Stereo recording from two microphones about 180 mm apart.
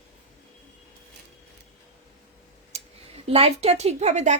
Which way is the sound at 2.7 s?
35° right (ahead or behind).